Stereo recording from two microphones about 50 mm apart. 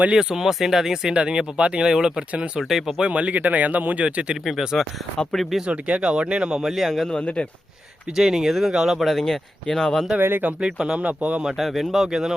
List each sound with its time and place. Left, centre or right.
0.1 s speech: centre
1.1 s speech: right
3.0 s speech: right
4.4 s speech: centre
5.6 s speech: right
6.7 s speech: centre
7.1 s speech: left
8.1 s speech: centre
10.2 s speech: right
10.6 s speech: centre
10.9 s speech: right
11.5 s speech: centre
12.0 s speech: centre